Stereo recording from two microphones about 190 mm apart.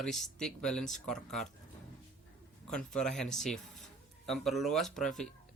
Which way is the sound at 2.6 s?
5° left (ahead or behind).